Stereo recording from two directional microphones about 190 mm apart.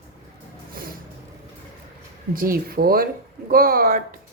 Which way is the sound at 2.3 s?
50° right (ahead or behind).